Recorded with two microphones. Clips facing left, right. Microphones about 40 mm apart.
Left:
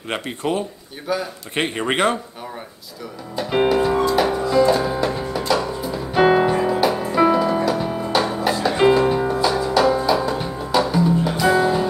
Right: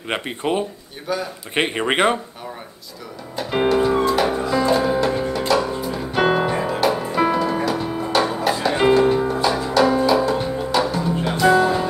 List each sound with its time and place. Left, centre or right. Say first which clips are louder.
0.1 s speech: right 1 dB; centre
1.0 s a man's voice: left 1 dB; centre
1.5 s speech: right 2 dB; centre
3.3 s music: left 1 dB; centre